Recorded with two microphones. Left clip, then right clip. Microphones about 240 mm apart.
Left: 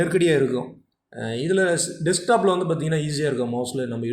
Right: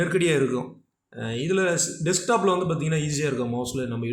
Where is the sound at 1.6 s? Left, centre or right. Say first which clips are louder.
Left 3 dB; right.